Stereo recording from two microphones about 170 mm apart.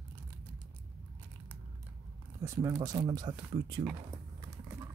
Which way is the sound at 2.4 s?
20° right (ahead or behind).